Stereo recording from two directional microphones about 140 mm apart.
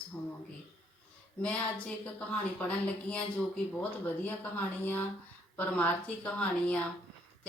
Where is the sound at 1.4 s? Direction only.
10° left (ahead or behind).